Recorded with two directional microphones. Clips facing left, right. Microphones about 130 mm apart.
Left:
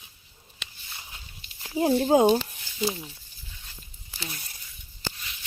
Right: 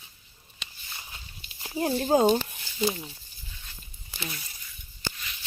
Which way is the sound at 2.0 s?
15° left (ahead or behind).